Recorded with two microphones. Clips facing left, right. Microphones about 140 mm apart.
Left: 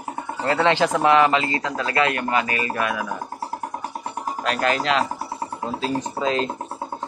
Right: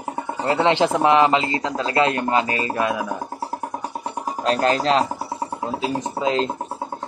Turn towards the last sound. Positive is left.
turn(degrees=-20)  # may be behind; listen again after turning